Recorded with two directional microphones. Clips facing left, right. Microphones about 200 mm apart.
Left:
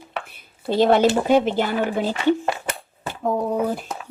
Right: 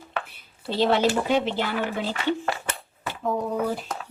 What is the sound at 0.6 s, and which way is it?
A woman's voice, 50° left (ahead or behind).